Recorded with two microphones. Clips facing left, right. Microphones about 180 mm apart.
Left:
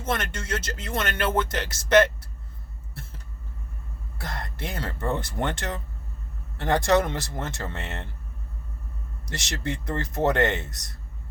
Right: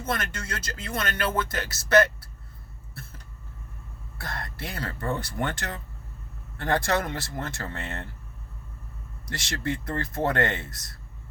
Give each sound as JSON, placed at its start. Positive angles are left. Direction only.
{"t": 0.0, "sound": "speech", "side_deg": 25}
{"t": 4.2, "sound": "speech", "side_deg": 20}
{"t": 9.3, "sound": "speech", "side_deg": 20}